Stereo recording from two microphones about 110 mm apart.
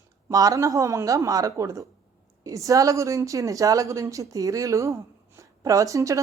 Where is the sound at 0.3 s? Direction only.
30° right (ahead or behind).